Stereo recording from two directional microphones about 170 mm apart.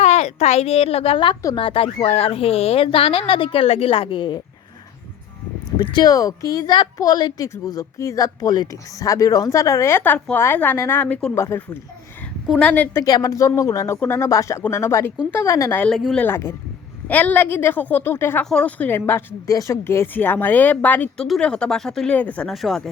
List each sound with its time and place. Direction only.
0.0 s a woman's voice: 40° left (ahead or behind)
5.9 s a woman's voice: 20° left (ahead or behind)
15.9 s speech: centre (ahead or behind)
16.2 s speech: 15° left (ahead or behind)